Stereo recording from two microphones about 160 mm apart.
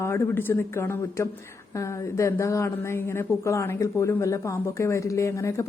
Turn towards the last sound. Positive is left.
turn(degrees=20)  # may be behind; listen again after turning